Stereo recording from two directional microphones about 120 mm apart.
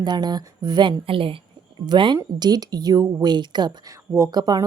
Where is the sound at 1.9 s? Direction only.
40° right (ahead or behind).